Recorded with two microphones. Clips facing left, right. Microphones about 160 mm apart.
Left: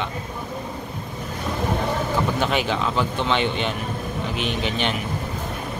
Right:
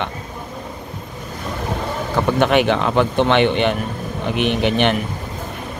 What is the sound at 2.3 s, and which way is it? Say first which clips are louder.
Speech: right 7 dB; 65° right (ahead or behind).